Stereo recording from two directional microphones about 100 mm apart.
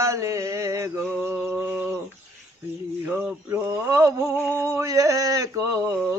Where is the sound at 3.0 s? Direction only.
20° right (ahead or behind).